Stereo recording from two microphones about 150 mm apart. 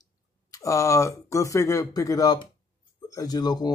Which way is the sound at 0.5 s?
20° left (ahead or behind).